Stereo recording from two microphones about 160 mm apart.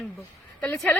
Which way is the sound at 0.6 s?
20° left (ahead or behind).